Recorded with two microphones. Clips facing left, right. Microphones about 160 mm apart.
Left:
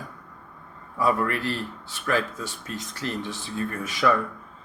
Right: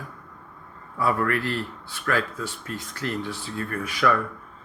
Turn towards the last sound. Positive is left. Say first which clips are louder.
# even
turn(degrees=20)  # may be behind; listen again after turning